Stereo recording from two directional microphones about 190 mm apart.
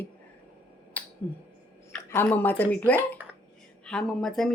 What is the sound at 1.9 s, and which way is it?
A woman's voice, 10° left (ahead or behind).